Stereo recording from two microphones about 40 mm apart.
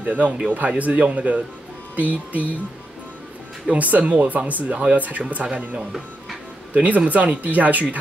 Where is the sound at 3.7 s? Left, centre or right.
Right.